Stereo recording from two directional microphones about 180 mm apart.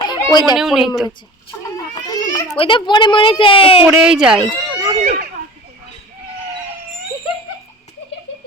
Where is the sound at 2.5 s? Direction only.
30° left (ahead or behind).